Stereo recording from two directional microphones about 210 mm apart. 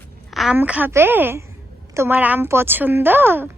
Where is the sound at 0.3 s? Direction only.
5° right (ahead or behind).